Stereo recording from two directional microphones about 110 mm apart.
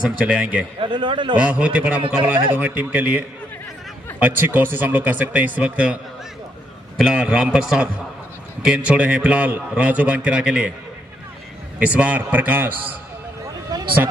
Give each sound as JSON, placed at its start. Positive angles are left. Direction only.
{"t": 0.2, "sound": "a man's voice", "side_deg": -10}
{"t": 0.7, "sound": "a man's voice", "side_deg": -50}
{"t": 1.3, "sound": "a man's voice", "side_deg": -10}
{"t": 7.0, "sound": "a man's voice", "side_deg": -10}
{"t": 11.8, "sound": "a man's voice", "side_deg": -15}
{"t": 13.7, "sound": "a sound", "side_deg": -35}